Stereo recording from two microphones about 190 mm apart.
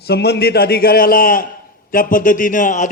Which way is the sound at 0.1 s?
60° left (ahead or behind).